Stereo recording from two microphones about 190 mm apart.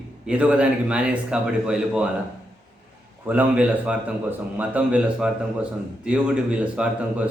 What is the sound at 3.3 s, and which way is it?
A man's voice, 5° right (ahead or behind).